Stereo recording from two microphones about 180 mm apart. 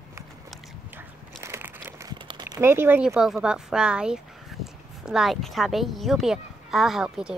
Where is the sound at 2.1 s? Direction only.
30° right (ahead or behind).